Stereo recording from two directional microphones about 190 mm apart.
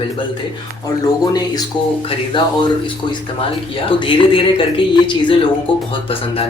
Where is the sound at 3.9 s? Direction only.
25° left (ahead or behind).